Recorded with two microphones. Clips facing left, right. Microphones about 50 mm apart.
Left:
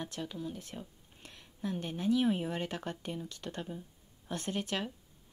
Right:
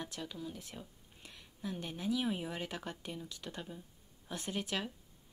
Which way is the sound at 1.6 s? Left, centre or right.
Left.